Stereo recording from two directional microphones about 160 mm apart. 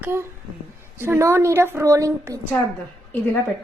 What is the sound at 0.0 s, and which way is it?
A woman's voice, 15° right (ahead or behind).